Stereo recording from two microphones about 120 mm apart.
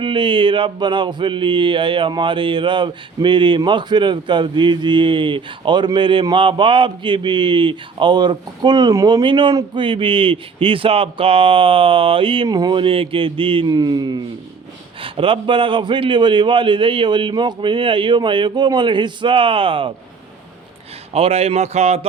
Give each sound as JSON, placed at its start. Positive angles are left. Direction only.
{"t": 0.0, "sound": "mantra", "side_deg": -45}
{"t": 6.3, "sound": "speech", "side_deg": -45}
{"t": 9.2, "sound": "mantra", "side_deg": -40}
{"t": 12.5, "sound": "mantra", "side_deg": -35}
{"t": 15.0, "sound": "mantra", "side_deg": -45}
{"t": 21.1, "sound": "speech", "side_deg": -55}